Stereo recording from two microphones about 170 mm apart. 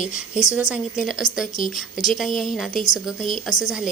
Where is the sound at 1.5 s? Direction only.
50° left (ahead or behind).